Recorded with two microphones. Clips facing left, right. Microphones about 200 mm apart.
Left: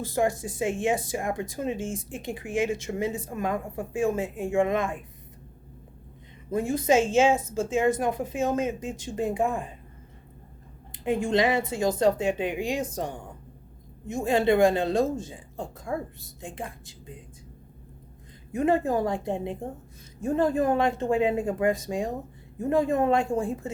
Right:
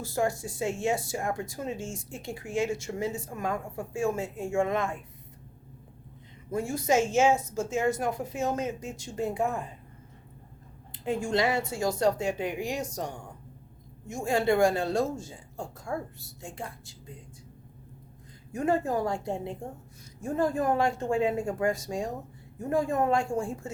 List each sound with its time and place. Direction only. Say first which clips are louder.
0.1 s a woman's voice: left 2 dB; 20° left (ahead or behind)
6.5 s speech: left 4 dB; 20° left (ahead or behind)
7.9 s speech: left 3 dB; 20° left (ahead or behind)
10.9 s speech: left 4 dB; 15° left (ahead or behind)
18.5 s speech: left 3 dB; 20° left (ahead or behind)